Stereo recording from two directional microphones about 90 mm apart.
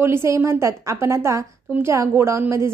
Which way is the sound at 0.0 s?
30° right (ahead or behind).